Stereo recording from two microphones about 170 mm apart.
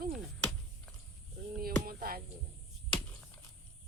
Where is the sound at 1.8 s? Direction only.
60° right (ahead or behind).